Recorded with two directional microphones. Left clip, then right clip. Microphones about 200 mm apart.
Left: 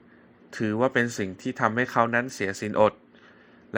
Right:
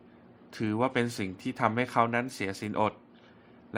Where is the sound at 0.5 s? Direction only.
15° left (ahead or behind).